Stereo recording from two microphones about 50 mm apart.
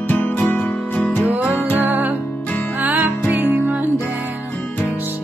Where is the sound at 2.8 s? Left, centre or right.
Right.